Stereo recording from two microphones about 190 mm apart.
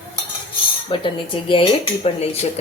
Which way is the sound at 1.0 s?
25° left (ahead or behind).